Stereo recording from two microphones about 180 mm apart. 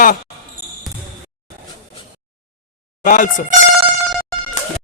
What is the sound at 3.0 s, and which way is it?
Speech, 45° left (ahead or behind).